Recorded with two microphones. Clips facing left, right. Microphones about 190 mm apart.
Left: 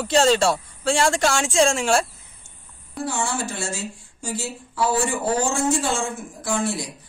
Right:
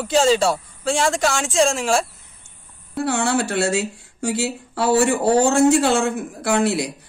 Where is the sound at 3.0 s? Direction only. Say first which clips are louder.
Right 6 dB; 65° right (ahead or behind).